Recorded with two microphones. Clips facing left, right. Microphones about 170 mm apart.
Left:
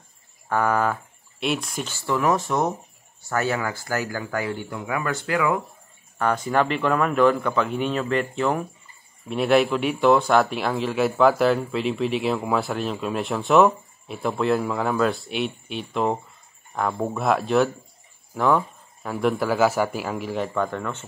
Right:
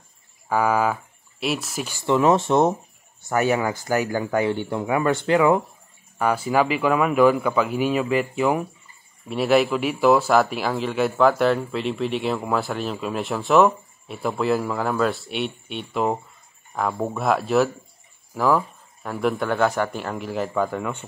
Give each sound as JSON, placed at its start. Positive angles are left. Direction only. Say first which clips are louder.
{"t": 0.5, "sound": "speech", "louder": "right 1 dB", "side_deg": -10}
{"t": 2.0, "sound": "speech", "louder": "right 4 dB", "side_deg": -20}
{"t": 6.1, "sound": "speech", "louder": "right 1 dB", "side_deg": -10}